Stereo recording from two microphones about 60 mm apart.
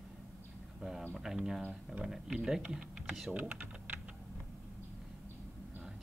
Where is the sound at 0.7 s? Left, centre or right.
Centre.